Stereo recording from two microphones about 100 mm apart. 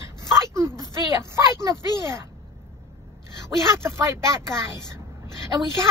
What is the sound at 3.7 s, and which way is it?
Speech, 25° right (ahead or behind).